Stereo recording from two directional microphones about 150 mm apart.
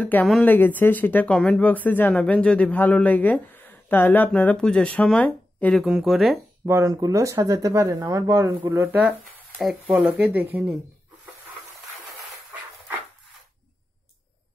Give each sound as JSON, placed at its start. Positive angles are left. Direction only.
{"t": 0.0, "sound": "speech", "side_deg": 5}
{"t": 6.6, "sound": "speech", "side_deg": -25}